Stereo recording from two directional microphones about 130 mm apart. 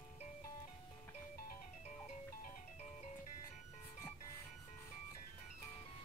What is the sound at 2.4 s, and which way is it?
Music, 65° left (ahead or behind).